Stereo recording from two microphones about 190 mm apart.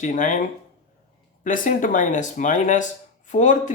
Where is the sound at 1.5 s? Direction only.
45° left (ahead or behind).